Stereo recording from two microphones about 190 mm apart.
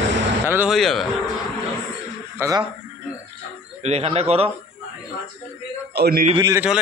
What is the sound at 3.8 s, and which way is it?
Speech, 35° right (ahead or behind).